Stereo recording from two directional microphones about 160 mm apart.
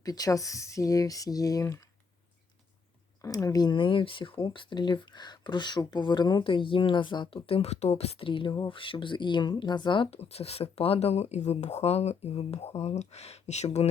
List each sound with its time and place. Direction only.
0.0 s speech: 25° left (ahead or behind)
3.2 s speech: 20° left (ahead or behind); by 13.8 s 45° left (ahead or behind)